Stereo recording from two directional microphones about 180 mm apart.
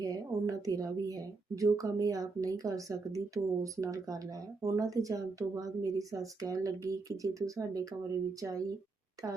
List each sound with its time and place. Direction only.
0.0 s a woman's voice: 20° right (ahead or behind)